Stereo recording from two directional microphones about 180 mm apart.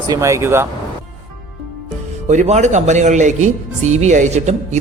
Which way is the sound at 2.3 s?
40° right (ahead or behind).